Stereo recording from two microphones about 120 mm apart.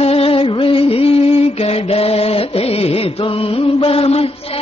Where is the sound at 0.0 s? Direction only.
55° left (ahead or behind).